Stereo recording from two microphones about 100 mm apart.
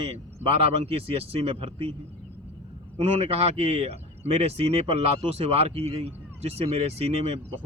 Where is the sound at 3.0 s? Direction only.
90° right.